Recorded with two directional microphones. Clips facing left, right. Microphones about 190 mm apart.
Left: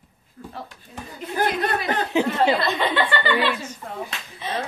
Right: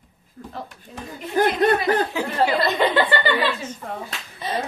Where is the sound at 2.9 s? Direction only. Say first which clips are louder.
Right 3 dB; 40° right (ahead or behind).